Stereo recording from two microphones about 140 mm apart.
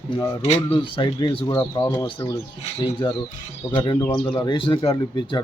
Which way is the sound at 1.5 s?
25° left (ahead or behind).